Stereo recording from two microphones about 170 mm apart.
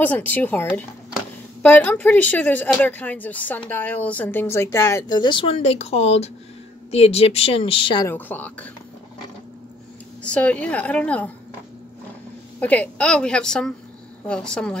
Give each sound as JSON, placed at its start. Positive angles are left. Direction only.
{"t": 0.0, "sound": "a woman's voice", "side_deg": 10}
{"t": 8.1, "sound": "a woman's voice", "side_deg": 10}
{"t": 10.2, "sound": "a woman's voice", "side_deg": 5}
{"t": 12.5, "sound": "a woman's voice", "side_deg": 10}